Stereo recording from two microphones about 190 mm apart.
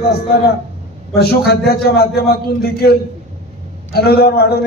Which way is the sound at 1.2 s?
55° left (ahead or behind).